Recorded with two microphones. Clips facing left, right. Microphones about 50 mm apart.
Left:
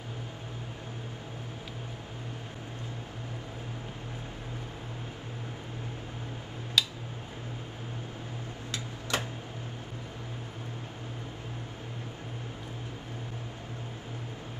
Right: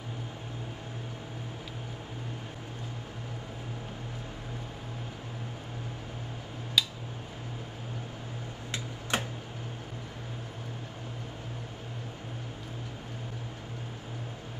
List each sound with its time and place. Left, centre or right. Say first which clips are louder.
6.8 s tick-tock: even; centre
9.1 s tick-tock: right 1 dB; right